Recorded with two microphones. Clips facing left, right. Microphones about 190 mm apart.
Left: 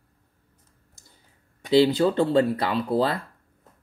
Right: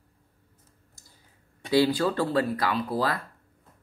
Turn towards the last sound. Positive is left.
turn(degrees=25)  # may be behind; listen again after turning